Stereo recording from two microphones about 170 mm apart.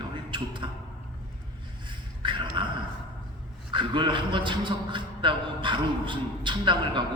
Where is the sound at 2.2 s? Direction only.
30° right (ahead or behind).